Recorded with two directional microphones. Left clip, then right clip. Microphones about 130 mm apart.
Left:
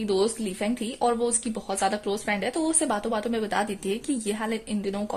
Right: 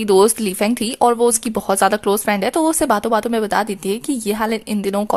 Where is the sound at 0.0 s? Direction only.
45° right (ahead or behind).